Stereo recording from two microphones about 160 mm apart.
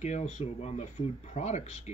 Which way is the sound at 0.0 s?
45° left (ahead or behind).